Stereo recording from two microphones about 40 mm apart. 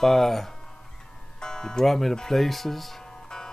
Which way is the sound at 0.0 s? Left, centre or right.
Centre.